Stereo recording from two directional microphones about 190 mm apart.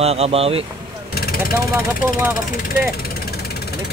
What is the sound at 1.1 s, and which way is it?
Vehicle, 50° left (ahead or behind).